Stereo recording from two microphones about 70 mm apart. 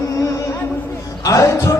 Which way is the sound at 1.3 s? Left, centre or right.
Left.